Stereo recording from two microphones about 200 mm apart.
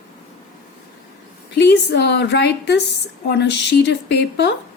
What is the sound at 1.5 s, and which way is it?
Speech, 55° left (ahead or behind).